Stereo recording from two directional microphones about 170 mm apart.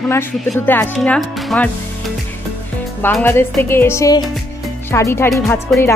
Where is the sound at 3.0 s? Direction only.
10° left (ahead or behind).